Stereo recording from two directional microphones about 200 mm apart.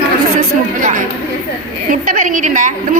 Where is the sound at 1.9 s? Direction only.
40° right (ahead or behind).